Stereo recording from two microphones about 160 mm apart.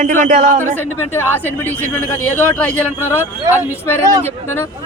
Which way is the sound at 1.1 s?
15° left (ahead or behind).